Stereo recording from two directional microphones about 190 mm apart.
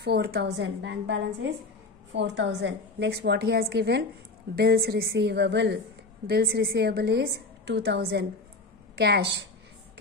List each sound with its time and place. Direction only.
0.0 s a woman's voice: 55° right (ahead or behind)